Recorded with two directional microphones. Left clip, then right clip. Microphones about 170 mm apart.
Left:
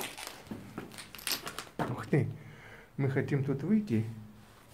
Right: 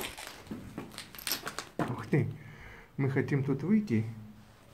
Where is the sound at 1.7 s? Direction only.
20° left (ahead or behind).